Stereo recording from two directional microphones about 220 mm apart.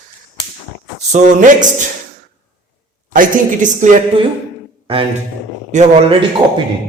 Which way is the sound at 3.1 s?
35° right (ahead or behind).